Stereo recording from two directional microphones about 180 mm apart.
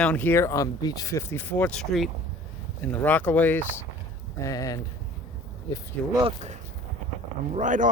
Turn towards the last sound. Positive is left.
turn(degrees=-45)  # may be behind; listen again after turning